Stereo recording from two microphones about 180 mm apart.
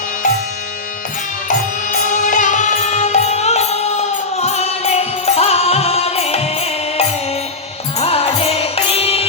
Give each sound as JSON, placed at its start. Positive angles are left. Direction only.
{"t": 1.5, "sound": "music", "side_deg": 45}
{"t": 7.9, "sound": "music", "side_deg": 30}